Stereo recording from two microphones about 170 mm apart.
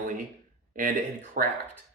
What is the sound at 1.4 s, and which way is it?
Speech, 50° right (ahead or behind).